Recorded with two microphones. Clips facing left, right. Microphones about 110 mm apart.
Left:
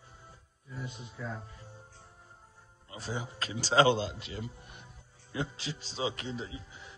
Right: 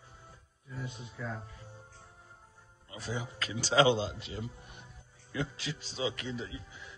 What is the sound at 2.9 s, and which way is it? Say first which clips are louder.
Music: even; 35° left (ahead or behind).